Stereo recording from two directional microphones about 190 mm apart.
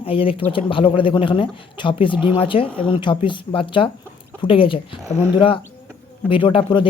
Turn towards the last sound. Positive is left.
turn(degrees=25)  # may be behind; listen again after turning